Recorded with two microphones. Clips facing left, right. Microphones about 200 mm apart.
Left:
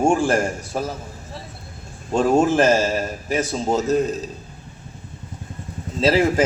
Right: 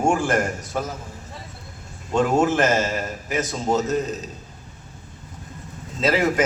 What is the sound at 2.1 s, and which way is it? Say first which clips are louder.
A man's voice: left 2 dB; 30° left (ahead or behind).